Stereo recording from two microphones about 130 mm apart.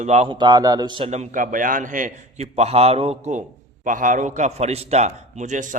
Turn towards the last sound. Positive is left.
turn(degrees=-75)  # may be behind; listen again after turning